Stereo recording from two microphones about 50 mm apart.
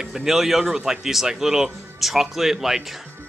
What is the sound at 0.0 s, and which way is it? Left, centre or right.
Speech, centre.